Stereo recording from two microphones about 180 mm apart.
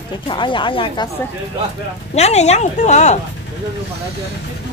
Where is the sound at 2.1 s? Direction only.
35° left (ahead or behind).